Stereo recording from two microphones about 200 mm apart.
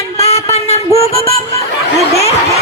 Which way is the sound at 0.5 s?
30° left (ahead or behind).